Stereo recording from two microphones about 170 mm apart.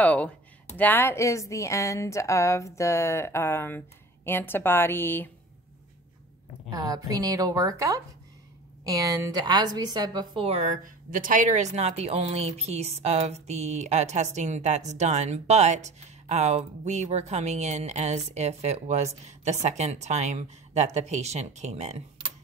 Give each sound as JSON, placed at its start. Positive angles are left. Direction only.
{"t": 0.0, "sound": "a woman's voice", "side_deg": 10}
{"t": 6.7, "sound": "a woman's voice", "side_deg": -20}